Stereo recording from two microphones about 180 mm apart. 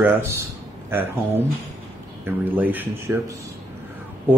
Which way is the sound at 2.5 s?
10° right (ahead or behind).